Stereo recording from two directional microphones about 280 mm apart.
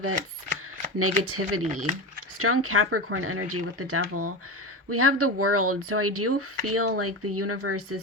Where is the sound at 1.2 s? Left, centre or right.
Right.